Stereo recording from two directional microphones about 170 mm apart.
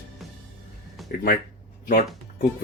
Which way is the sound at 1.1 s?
55° left (ahead or behind).